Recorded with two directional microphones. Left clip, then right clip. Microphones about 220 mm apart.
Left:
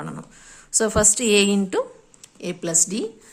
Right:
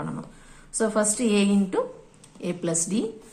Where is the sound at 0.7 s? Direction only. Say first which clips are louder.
Left 4 dB; 40° left (ahead or behind).